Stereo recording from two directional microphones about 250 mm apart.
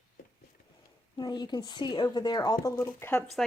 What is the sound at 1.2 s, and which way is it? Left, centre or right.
Speech, centre.